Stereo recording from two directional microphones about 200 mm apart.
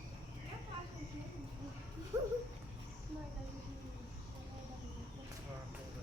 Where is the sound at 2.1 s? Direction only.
20° right (ahead or behind).